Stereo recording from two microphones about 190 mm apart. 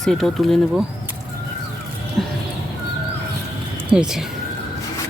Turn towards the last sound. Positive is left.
turn(degrees=-5)  # may be behind; listen again after turning